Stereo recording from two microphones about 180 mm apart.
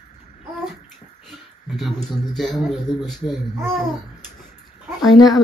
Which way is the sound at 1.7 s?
Centre (ahead or behind).